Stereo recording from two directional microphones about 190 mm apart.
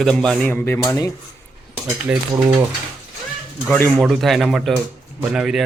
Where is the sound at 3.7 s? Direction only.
10° left (ahead or behind).